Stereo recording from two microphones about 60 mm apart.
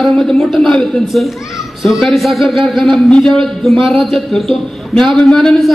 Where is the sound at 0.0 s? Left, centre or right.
Centre.